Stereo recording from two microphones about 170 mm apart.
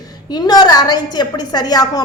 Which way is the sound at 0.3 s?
25° left (ahead or behind).